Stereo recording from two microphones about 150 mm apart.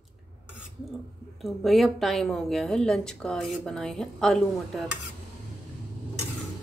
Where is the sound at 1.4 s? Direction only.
Centre (ahead or behind).